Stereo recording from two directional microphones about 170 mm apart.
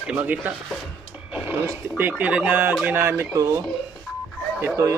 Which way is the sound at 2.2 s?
10° right (ahead or behind).